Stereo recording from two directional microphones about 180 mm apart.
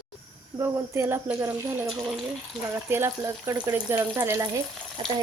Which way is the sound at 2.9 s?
15° right (ahead or behind).